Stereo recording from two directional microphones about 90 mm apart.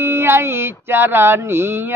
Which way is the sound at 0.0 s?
30° right (ahead or behind).